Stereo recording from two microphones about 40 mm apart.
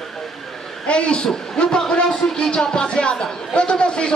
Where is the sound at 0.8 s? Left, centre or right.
Left.